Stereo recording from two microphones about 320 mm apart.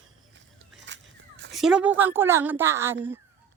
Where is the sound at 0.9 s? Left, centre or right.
Right.